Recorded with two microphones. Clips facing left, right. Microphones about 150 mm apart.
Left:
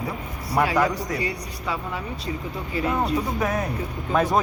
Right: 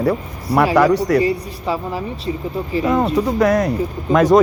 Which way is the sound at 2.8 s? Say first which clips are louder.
Right 7 dB; 80° right.